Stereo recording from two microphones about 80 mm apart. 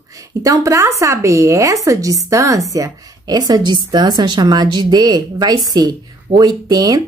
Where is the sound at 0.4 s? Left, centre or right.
Right.